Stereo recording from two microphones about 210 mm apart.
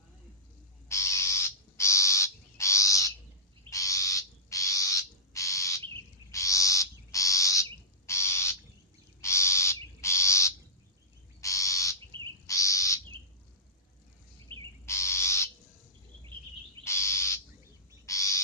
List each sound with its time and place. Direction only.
0.9 s bird: 15° left (ahead or behind)
3.7 s a sound: 15° left (ahead or behind)
6.3 s owl: 15° left (ahead or behind)
9.2 s crow: 15° left (ahead or behind)
11.3 s owl: 15° left (ahead or behind)
14.5 s bird: 25° right (ahead or behind)
14.8 s owl: 15° left (ahead or behind)
16.8 s bird: 15° left (ahead or behind)
18.0 s owl: 15° left (ahead or behind)